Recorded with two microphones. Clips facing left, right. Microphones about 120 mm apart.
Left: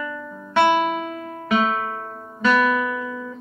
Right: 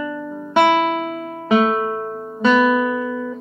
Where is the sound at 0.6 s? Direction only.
85° right.